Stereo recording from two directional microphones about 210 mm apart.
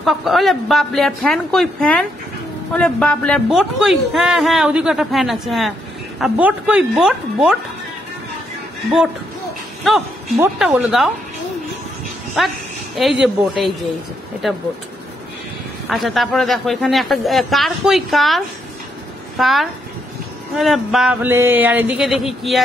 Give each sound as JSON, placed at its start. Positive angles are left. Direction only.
{"t": 0.0, "sound": "speech", "side_deg": 0}
{"t": 9.8, "sound": "a woman's voice", "side_deg": 0}
{"t": 12.4, "sound": "speech", "side_deg": 0}
{"t": 15.9, "sound": "speech", "side_deg": 0}